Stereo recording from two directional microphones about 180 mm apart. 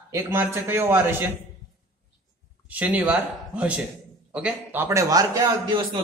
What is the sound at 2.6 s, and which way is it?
A man's voice, 10° right (ahead or behind).